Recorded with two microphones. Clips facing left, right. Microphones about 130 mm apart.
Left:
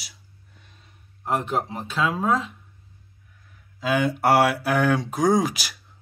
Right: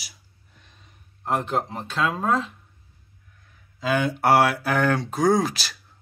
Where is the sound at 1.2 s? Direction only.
5° left (ahead or behind).